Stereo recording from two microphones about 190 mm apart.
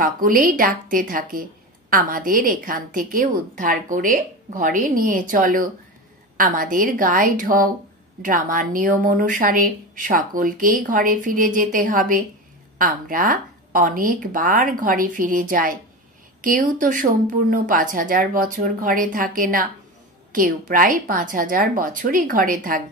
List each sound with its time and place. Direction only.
0.0 s a woman's voice: 45° right (ahead or behind)